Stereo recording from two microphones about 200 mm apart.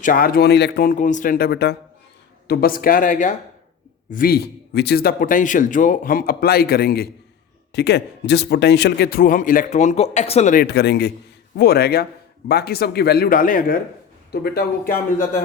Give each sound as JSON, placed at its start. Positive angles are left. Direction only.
{"t": 0.0, "sound": "a man's voice", "side_deg": 45}
{"t": 14.9, "sound": "speech", "side_deg": 10}